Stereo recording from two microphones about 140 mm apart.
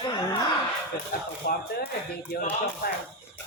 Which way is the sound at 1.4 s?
90° left.